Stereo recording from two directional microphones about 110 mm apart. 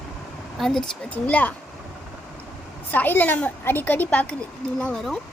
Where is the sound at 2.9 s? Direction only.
15° left (ahead or behind).